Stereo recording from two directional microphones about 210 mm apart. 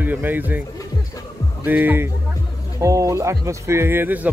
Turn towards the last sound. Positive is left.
turn(degrees=-10)  # may be behind; listen again after turning